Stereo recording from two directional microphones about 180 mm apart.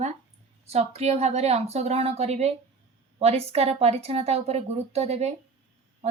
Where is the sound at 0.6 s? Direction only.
35° right (ahead or behind).